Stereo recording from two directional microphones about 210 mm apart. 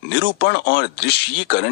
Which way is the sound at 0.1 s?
55° left (ahead or behind).